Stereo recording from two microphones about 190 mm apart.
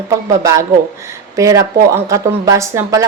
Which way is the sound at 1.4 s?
15° right (ahead or behind).